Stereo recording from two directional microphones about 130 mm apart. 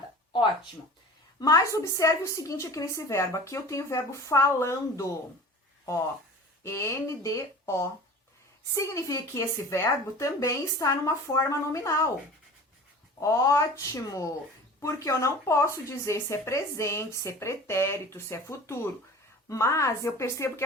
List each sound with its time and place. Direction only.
1.4 s speech: 25° left (ahead or behind)
6.6 s speech: 25° left (ahead or behind)
13.1 s speech: 25° left (ahead or behind)